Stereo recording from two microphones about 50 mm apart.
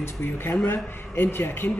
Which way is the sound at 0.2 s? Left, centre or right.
Left.